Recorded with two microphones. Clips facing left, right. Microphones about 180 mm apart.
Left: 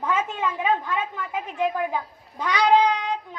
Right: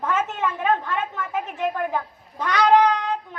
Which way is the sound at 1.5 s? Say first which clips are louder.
Left 3 dB; 55° right (ahead or behind).